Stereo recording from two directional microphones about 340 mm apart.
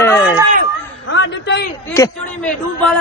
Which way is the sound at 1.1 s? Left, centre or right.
Left.